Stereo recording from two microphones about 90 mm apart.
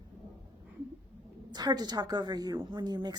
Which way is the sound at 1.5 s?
50° right (ahead or behind).